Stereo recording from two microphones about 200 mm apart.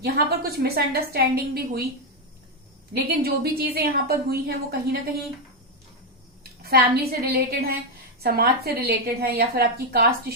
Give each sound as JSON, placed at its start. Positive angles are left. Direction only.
{"t": 0.0, "sound": "a woman's voice", "side_deg": -50}
{"t": 3.2, "sound": "a woman's voice", "side_deg": -50}
{"t": 6.6, "sound": "a woman's voice", "side_deg": -50}